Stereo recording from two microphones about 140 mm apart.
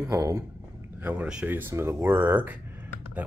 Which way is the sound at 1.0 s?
10° right (ahead or behind).